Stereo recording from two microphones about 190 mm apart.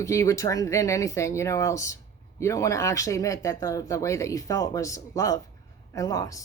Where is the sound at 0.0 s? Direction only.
15° left (ahead or behind).